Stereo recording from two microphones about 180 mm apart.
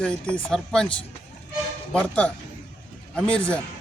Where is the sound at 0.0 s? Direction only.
5° left (ahead or behind).